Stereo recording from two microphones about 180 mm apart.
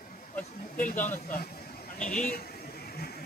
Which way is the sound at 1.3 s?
55° left (ahead or behind).